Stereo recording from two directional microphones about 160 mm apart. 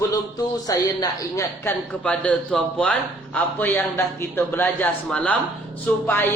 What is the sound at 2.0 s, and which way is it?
A man's voice, 10° left (ahead or behind).